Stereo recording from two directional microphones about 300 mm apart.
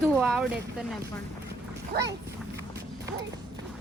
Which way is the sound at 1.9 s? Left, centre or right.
Right.